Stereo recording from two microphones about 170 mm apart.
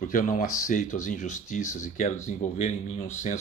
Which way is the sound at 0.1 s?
50° left (ahead or behind).